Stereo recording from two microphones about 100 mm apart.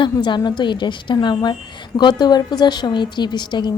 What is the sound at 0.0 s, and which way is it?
A woman's voice, 50° left (ahead or behind).